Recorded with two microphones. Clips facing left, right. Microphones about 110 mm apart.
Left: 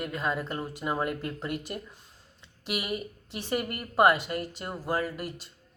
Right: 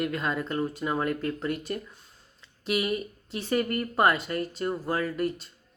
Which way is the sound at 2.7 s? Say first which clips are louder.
Right 5 dB; 15° left (ahead or behind).